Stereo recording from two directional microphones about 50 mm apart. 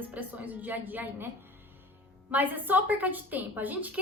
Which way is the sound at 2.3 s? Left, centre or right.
Right.